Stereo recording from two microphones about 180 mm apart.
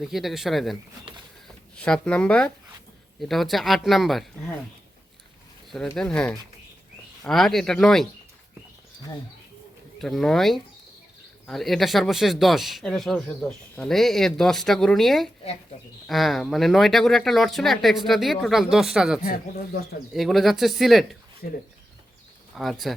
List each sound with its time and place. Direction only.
0.0 s speech: centre (ahead or behind)
6.0 s speech: 5° left (ahead or behind)
10.0 s speech: centre (ahead or behind)
19.2 s speech: 55° left (ahead or behind)
20.1 s speech: centre (ahead or behind)
22.5 s speech: centre (ahead or behind)